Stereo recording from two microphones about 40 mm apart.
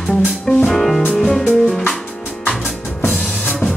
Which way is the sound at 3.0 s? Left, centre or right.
Left.